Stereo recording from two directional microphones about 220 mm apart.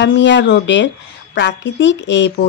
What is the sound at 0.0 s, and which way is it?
Speech, 55° left (ahead or behind).